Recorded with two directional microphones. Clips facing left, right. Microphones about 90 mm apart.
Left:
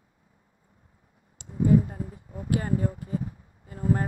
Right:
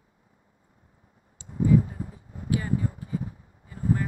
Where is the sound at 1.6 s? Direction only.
45° left (ahead or behind).